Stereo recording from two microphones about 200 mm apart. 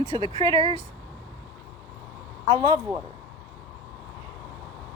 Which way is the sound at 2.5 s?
20° right (ahead or behind).